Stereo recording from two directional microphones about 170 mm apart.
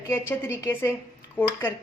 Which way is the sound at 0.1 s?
15° left (ahead or behind).